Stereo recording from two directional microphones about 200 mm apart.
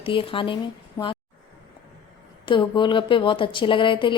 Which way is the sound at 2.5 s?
25° left (ahead or behind).